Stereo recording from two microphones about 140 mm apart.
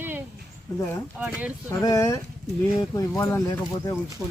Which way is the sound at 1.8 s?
25° left (ahead or behind).